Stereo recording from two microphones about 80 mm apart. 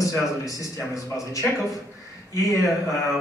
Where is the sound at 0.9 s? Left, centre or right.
Left.